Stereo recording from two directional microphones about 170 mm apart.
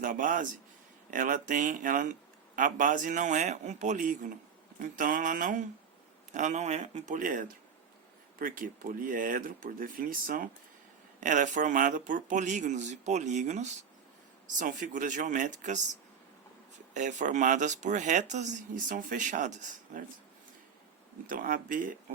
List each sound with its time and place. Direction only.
0.0 s speech: 50° right (ahead or behind)
21.2 s speech: 55° right (ahead or behind)